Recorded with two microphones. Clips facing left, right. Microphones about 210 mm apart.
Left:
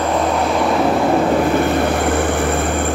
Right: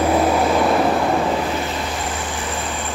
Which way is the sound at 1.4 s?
55° left (ahead or behind).